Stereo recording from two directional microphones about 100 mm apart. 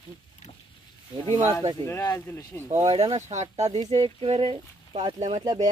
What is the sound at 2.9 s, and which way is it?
Speech, 85° right.